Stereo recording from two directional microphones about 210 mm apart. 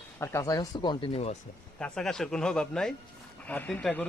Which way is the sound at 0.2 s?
15° left (ahead or behind).